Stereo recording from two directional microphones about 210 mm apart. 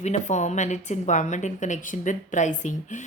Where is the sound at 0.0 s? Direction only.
35° left (ahead or behind).